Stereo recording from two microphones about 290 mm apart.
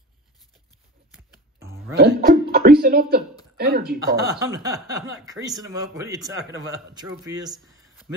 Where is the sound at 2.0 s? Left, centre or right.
Right.